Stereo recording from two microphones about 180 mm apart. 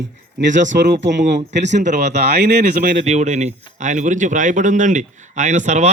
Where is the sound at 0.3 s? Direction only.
90° right.